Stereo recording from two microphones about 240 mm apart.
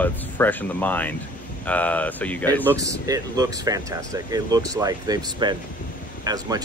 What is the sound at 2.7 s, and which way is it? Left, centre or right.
Speech, centre.